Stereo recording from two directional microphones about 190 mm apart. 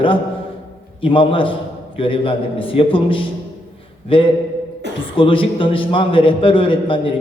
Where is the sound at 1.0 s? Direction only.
25° left (ahead or behind).